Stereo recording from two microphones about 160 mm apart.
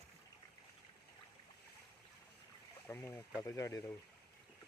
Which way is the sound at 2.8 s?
15° left (ahead or behind).